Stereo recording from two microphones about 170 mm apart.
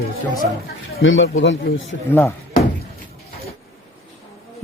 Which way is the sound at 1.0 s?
90° left.